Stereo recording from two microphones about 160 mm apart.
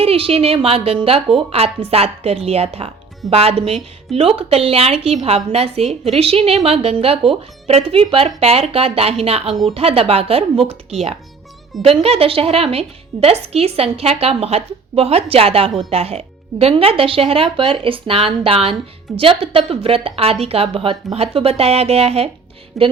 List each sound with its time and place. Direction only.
0.0 s speech: 35° right (ahead or behind)
22.8 s a woman's voice: centre (ahead or behind)